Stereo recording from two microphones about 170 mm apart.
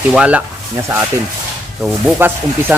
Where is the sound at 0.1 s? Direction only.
5° right (ahead or behind).